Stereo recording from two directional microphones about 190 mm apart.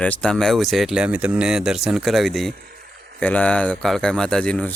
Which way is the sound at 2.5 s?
50° right (ahead or behind).